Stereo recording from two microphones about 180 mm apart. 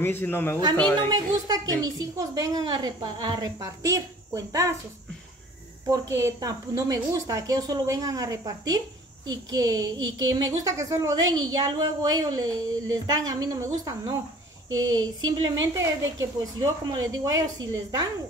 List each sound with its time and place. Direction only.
0.0 s a man's voice: 10° left (ahead or behind)
1.1 s a woman's voice: 20° right (ahead or behind)
5.9 s a woman's voice: 15° right (ahead or behind)
9.9 s a sound: 90° right
10.3 s a woman's voice: 20° right (ahead or behind)
16.5 s a woman's voice: 20° right (ahead or behind)